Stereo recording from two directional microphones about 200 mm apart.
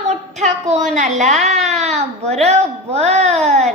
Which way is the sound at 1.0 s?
35° right (ahead or behind).